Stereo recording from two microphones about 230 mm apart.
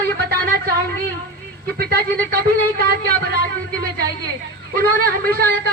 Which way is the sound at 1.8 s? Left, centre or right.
Right.